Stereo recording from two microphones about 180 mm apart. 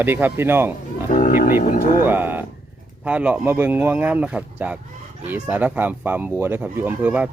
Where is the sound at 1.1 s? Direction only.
45° left (ahead or behind).